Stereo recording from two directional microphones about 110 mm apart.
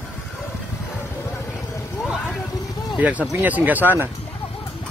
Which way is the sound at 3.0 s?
15° right (ahead or behind).